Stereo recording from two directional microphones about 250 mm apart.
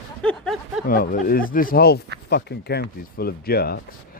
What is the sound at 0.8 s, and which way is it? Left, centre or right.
Speech, left.